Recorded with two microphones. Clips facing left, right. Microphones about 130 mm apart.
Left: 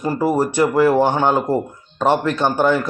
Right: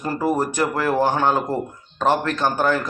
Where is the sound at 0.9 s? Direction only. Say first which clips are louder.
Left 4 dB; 20° left (ahead or behind).